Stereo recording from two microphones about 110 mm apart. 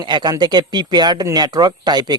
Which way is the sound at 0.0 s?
40° right (ahead or behind).